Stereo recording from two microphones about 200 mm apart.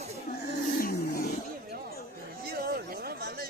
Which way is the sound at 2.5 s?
50° right (ahead or behind).